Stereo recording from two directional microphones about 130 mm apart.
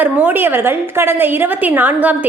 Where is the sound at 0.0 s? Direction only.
15° right (ahead or behind).